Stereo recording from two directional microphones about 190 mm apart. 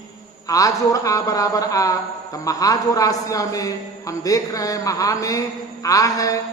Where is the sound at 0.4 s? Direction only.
15° left (ahead or behind).